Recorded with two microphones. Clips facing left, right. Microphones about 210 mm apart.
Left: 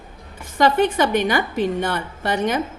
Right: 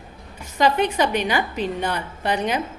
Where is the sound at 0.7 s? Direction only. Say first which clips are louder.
Left 3 dB; 50° left (ahead or behind).